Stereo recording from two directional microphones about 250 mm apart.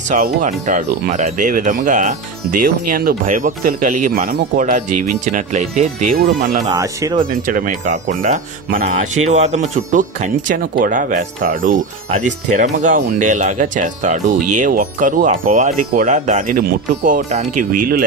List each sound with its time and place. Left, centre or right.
0.1 s speech: right
4.8 s speech: right
5.2 s speech: right
6.7 s speech: centre
7.4 s speech: right